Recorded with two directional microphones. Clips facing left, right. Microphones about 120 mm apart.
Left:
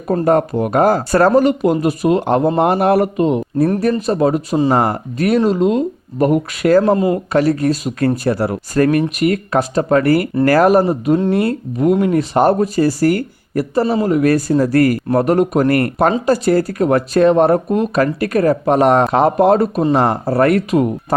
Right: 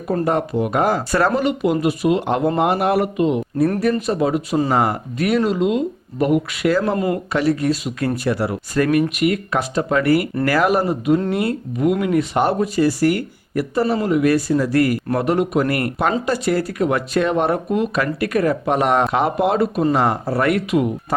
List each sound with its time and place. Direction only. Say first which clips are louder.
0.1 s speech: left 5 dB; 45° left (ahead or behind)
6.9 s speech: left 5 dB; 20° left (ahead or behind)
7.3 s speech: left 3 dB; 45° left (ahead or behind)